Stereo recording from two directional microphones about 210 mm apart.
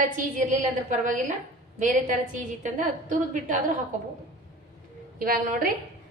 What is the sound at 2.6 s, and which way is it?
Speech, 40° right (ahead or behind).